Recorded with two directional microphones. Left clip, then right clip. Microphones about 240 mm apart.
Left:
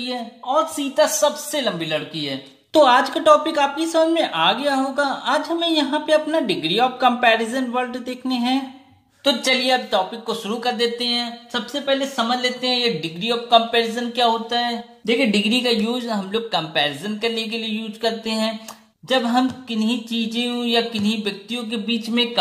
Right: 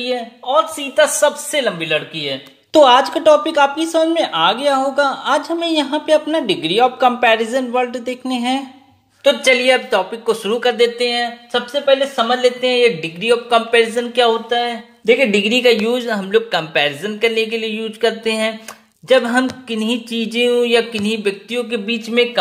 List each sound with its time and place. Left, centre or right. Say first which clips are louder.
0.0 s speech: right 6 dB; centre